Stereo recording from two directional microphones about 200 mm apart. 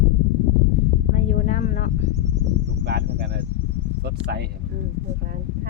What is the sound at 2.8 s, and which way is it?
Cricket, 55° right (ahead or behind).